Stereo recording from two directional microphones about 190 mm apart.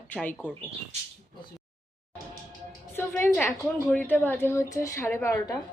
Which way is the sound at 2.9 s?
10° left (ahead or behind).